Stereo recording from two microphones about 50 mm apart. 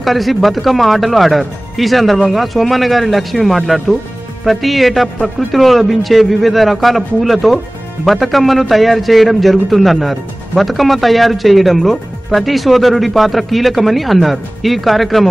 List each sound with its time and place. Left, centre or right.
0.0 s a man's voice: centre